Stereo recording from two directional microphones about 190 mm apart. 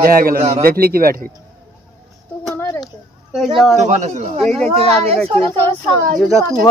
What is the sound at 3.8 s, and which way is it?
Speech, 35° right (ahead or behind).